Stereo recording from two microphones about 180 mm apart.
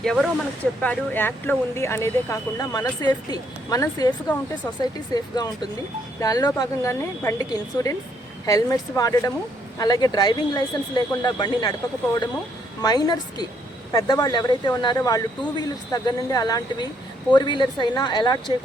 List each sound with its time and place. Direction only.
0.0 s speech: 5° left (ahead or behind); by 11.7 s 20° left (ahead or behind)
12.8 s speech: 25° left (ahead or behind)